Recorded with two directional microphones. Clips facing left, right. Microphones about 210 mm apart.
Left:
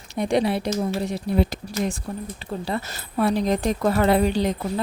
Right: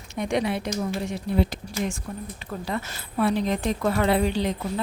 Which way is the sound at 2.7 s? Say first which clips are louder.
Left 2 dB; 35° left (ahead or behind).